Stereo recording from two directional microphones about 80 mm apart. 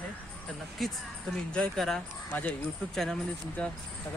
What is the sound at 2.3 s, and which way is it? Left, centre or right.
Speech, centre.